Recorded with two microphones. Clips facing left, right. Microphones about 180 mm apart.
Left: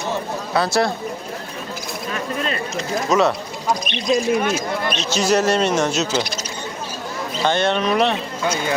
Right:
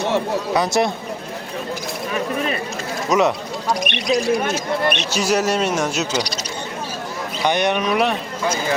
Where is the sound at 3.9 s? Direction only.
60° right (ahead or behind).